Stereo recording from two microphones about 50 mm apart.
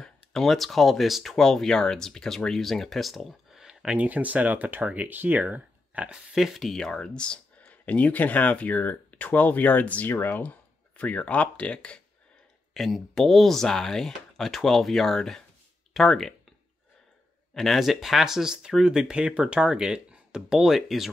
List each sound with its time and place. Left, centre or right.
0.0 s speech: centre
3.8 s speech: right
6.3 s speech: centre
6.8 s speech: centre; by 10.0 s left
10.0 s speech: left
10.4 s speech: left
12.7 s speech: centre
17.6 s speech: centre